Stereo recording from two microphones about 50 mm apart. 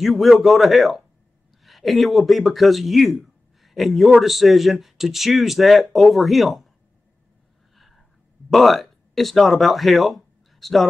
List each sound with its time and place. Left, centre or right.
0.0 s speech: centre
7.7 s a sound: centre
8.5 s speech: centre